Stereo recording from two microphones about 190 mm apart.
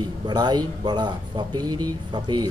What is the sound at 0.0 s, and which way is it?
A man's voice, 20° right (ahead or behind).